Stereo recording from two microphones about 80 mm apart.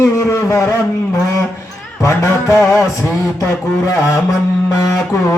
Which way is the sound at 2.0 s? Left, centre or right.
Left.